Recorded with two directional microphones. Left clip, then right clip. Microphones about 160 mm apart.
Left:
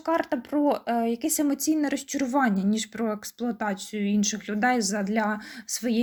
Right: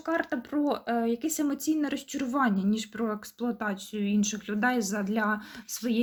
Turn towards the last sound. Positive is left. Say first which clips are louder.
# left 3 dB
turn(degrees=15)  # may be behind; listen again after turning